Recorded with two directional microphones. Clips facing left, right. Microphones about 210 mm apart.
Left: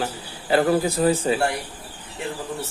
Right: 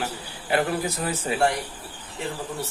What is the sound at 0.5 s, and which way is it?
Speech, 30° left (ahead or behind).